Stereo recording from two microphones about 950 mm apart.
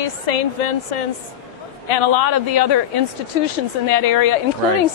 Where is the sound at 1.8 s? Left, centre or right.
Left.